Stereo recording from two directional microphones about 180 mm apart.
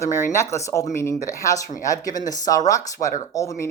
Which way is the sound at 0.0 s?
15° left (ahead or behind).